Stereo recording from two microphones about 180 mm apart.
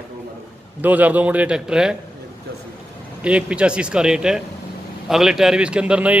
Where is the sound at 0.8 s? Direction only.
10° right (ahead or behind).